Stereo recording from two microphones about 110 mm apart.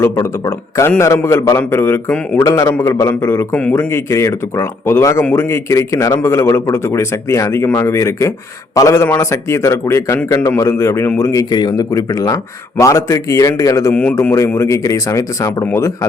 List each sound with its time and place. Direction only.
0.0 s speech: 25° left (ahead or behind)
13.9 s speech: 15° left (ahead or behind)